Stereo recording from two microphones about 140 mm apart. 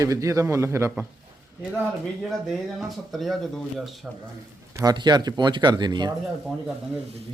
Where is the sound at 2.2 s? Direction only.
Centre (ahead or behind).